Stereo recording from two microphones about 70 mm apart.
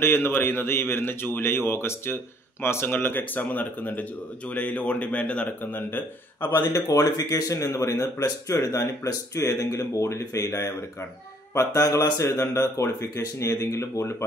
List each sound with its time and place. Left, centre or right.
0.0 s speech: left; by 5.7 s centre
5.7 s speech: left
6.7 s speech: left